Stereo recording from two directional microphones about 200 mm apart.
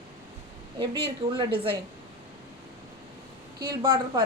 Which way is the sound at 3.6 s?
25° right (ahead or behind).